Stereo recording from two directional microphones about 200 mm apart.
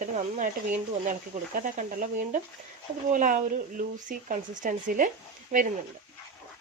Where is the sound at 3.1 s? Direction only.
40° right (ahead or behind).